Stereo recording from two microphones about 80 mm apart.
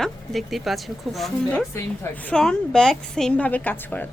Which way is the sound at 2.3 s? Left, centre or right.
Centre.